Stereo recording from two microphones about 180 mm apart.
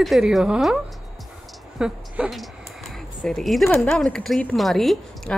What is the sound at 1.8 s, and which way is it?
Speech, 5° right (ahead or behind).